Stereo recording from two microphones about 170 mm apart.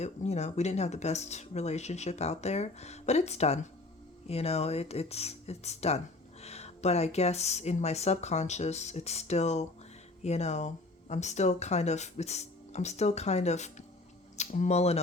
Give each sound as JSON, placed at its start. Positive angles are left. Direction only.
{"t": 0.0, "sound": "speech", "side_deg": 40}